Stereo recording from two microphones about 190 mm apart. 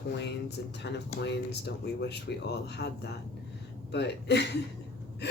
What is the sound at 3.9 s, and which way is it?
Speech, 65° left (ahead or behind).